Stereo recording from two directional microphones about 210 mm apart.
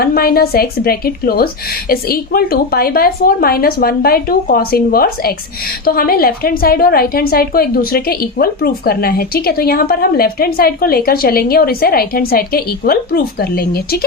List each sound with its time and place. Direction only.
0.0 s a woman's voice: 45° left (ahead or behind)